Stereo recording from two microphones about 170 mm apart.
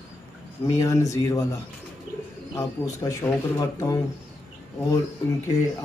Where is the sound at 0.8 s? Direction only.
20° left (ahead or behind).